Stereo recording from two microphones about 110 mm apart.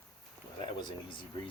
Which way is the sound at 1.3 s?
50° left (ahead or behind).